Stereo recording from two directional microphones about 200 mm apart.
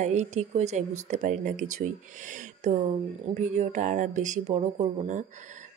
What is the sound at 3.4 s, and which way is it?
A woman's voice, 35° right (ahead or behind).